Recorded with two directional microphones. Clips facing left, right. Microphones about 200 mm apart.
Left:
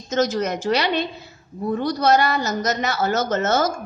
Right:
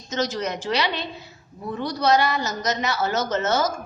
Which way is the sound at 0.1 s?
50° left (ahead or behind).